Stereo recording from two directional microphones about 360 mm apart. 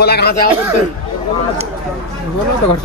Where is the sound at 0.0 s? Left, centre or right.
Left.